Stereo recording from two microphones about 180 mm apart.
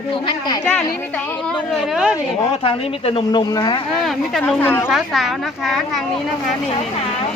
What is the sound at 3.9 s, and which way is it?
Speech, centre (ahead or behind).